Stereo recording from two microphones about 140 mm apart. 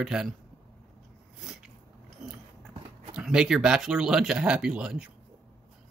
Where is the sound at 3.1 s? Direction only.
5° right (ahead or behind).